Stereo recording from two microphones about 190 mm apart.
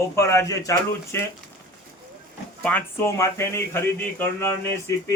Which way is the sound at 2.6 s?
5° left (ahead or behind).